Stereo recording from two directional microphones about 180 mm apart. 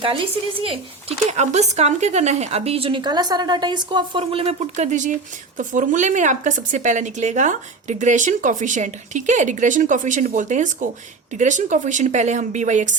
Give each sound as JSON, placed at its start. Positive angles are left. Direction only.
{"t": 1.3, "sound": "a woman's voice", "side_deg": -40}